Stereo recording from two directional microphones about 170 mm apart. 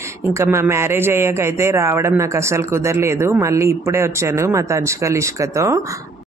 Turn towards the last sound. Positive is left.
turn(degrees=-15)  # may be behind; listen again after turning